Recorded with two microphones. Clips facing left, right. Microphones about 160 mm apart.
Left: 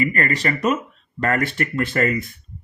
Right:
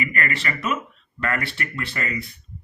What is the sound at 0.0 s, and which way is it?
Speech, 40° left (ahead or behind).